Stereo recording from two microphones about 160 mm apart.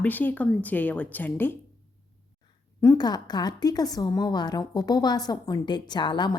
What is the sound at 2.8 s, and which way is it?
A woman's voice, 20° left (ahead or behind).